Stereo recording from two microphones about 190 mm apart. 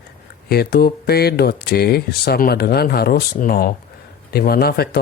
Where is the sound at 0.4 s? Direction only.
55° left (ahead or behind).